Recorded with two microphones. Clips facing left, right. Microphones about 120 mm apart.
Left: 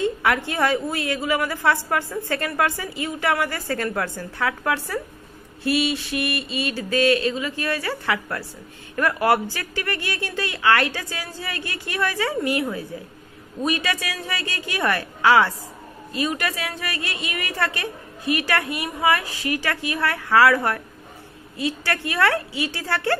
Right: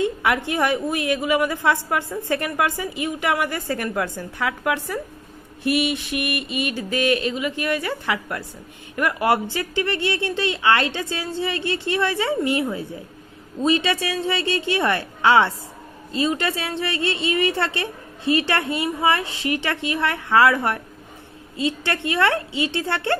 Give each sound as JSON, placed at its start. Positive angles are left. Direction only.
{"t": 0.0, "sound": "a woman's voice", "side_deg": -20}
{"t": 5.6, "sound": "a sound", "side_deg": -20}
{"t": 8.9, "sound": "a woman's voice", "side_deg": -20}